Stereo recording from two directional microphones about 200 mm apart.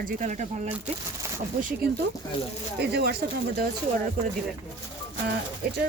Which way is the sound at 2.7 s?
50° right (ahead or behind).